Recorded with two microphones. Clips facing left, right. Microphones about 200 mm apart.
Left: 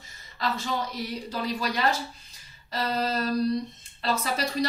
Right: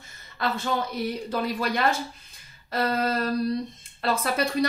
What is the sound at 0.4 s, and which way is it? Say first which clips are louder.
Speech: right 2 dB; 55° right (ahead or behind).